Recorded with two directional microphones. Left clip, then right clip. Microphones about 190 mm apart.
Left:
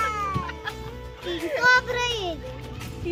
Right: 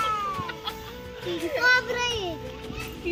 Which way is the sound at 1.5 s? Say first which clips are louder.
Left 2 dB; 10° left (ahead or behind).